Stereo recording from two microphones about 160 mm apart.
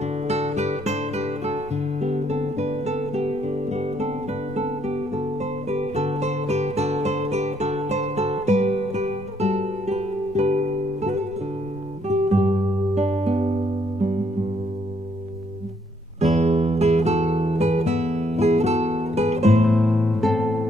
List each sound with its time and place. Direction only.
0.3 s music: 45° right (ahead or behind)
4.6 s guitar: 45° right (ahead or behind)
5.7 s music: 45° right (ahead or behind)
16.2 s music: 45° right (ahead or behind)
19.7 s music: centre (ahead or behind)